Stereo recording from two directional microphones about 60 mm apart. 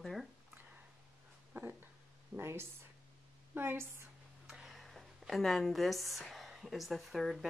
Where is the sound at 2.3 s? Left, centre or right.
Right.